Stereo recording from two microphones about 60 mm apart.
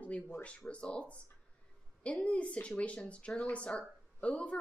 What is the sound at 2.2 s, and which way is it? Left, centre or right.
A woman's voice, left.